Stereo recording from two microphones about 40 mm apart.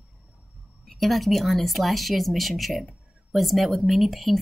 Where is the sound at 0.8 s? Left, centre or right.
Centre.